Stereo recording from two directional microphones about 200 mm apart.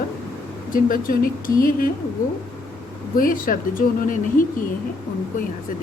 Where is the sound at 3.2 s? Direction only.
45° left (ahead or behind).